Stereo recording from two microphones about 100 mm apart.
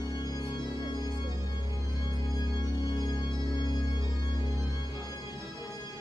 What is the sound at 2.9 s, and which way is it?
Music, 45° left (ahead or behind).